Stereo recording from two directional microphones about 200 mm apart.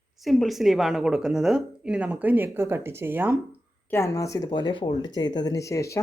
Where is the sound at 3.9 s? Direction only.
15° left (ahead or behind).